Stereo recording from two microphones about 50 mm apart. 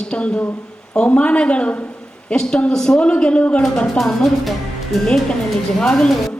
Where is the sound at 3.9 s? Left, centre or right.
Centre.